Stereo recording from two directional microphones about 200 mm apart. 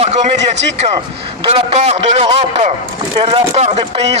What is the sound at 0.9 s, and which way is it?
Speech, 25° right (ahead or behind).